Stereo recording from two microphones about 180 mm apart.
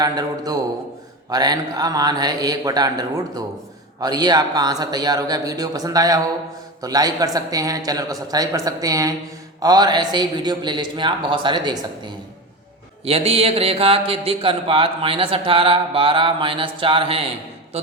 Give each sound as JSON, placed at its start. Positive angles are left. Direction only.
{"t": 0.0, "sound": "a man's voice", "side_deg": -20}
{"t": 13.1, "sound": "speech", "side_deg": -35}